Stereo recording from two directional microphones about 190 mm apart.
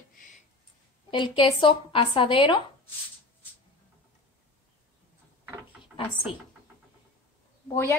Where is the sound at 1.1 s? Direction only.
25° left (ahead or behind).